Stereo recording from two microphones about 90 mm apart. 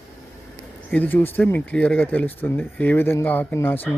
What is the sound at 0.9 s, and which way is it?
Speech, 20° left (ahead or behind).